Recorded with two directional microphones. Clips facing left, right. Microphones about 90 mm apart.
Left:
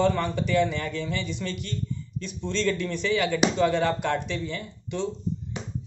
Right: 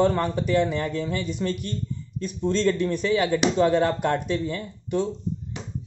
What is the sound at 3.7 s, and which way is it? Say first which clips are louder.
A man's voice: right 3 dB; 40° right (ahead or behind).